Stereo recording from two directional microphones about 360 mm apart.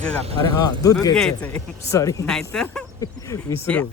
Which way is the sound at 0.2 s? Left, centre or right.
Centre.